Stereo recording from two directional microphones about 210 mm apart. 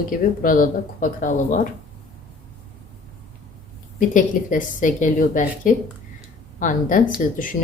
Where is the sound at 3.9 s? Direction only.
40° left (ahead or behind).